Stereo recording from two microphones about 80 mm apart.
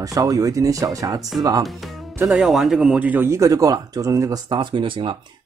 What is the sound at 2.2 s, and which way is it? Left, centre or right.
Speech, centre.